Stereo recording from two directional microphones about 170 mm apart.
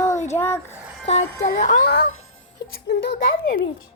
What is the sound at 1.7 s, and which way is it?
Speech, 80° left.